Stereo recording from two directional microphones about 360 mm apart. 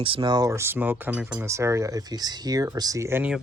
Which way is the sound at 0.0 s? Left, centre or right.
Centre.